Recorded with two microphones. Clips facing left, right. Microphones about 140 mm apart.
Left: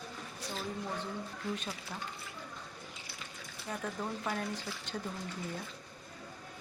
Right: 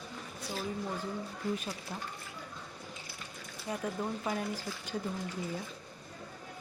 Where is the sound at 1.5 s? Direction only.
10° right (ahead or behind).